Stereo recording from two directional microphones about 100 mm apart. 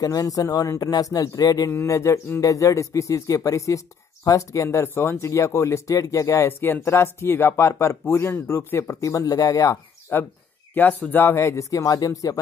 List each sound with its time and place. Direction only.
0.0 s speech: 35° left (ahead or behind)
1.7 s speech: 30° left (ahead or behind)
9.0 s speech: 35° left (ahead or behind)
10.1 s speech: 25° left (ahead or behind)